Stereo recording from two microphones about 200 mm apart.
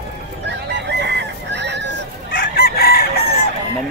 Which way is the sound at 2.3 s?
50° left (ahead or behind).